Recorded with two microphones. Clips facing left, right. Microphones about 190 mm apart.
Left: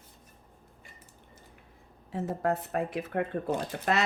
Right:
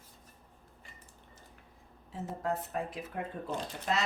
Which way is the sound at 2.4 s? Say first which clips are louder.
Left 4 dB; 65° left (ahead or behind).